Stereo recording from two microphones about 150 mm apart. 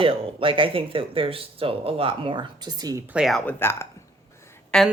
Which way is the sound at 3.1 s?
Centre (ahead or behind).